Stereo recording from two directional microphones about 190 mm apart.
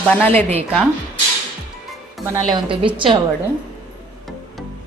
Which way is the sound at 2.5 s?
25° right (ahead or behind).